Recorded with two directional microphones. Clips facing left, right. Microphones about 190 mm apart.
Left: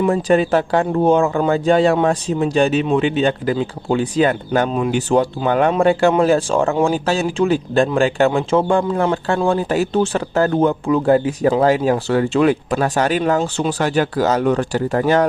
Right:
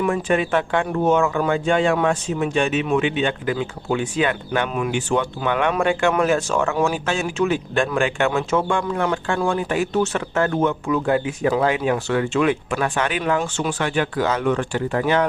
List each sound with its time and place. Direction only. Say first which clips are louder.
0.0 s speech: left 5 dB; 35° left (ahead or behind)